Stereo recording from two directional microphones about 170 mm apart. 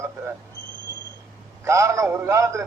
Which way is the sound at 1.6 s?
15° right (ahead or behind).